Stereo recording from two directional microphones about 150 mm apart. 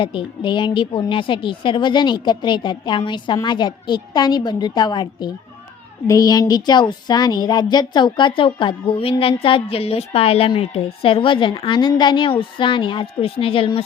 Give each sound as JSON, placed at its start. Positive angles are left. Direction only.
{"t": 0.0, "sound": "speech", "side_deg": 35}